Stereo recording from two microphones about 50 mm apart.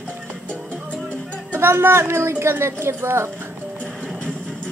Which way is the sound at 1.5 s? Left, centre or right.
Right.